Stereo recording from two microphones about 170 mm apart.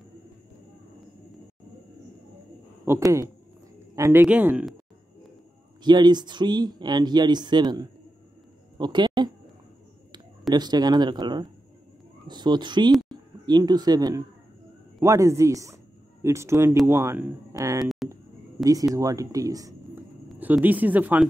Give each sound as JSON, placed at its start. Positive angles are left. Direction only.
{"t": 2.8, "sound": "a man's voice", "side_deg": -15}
{"t": 5.9, "sound": "speech", "side_deg": -25}
{"t": 8.7, "sound": "a sound", "side_deg": -25}
{"t": 10.5, "sound": "speech", "side_deg": -25}
{"t": 20.3, "sound": "speech", "side_deg": -10}